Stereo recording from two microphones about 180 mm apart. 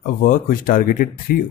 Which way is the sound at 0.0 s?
50° left (ahead or behind).